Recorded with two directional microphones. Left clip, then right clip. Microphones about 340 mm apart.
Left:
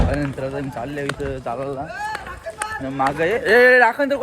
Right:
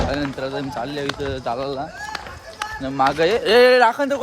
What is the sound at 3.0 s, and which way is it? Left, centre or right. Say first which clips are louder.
Speech: even; centre.